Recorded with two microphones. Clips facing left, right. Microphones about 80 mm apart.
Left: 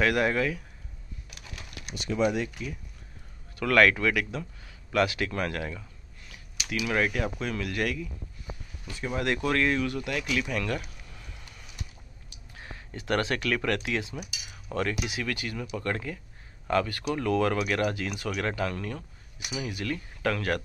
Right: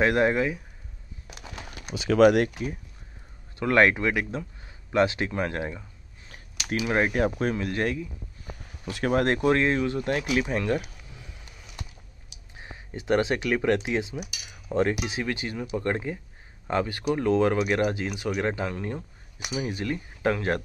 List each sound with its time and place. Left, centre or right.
0.0 s speech: right
1.2 s a sound: right
2.0 s speech: right
3.5 s speech: right
7.5 s speech: right
8.9 s speech: right
9.2 s speech: right
9.5 s speech: right
12.5 s speech: right